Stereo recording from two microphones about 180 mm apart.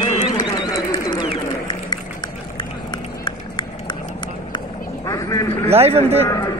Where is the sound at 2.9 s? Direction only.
25° left (ahead or behind).